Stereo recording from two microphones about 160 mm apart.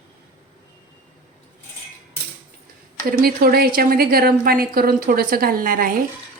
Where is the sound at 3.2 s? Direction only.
70° right (ahead or behind).